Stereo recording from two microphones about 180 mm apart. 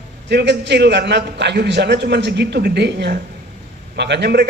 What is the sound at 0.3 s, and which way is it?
A man's voice, 70° right (ahead or behind).